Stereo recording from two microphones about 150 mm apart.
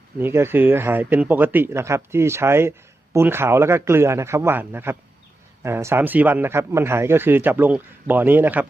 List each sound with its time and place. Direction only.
0.2 s speech: 15° right (ahead or behind)